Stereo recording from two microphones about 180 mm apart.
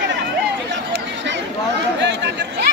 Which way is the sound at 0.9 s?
80° right.